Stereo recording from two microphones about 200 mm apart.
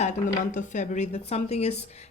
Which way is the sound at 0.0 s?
40° left (ahead or behind).